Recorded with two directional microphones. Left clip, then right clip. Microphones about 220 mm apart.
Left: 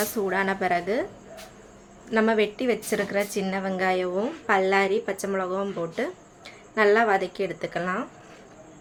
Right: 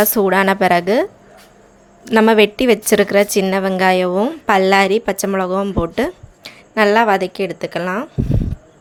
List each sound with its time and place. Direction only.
0.0 s a woman's voice: 45° right (ahead or behind)
2.0 s a woman's voice: 45° right (ahead or behind)